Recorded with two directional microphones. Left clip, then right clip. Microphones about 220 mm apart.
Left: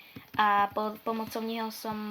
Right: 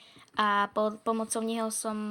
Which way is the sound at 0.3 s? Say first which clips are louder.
Left 1 dB; 50° right (ahead or behind).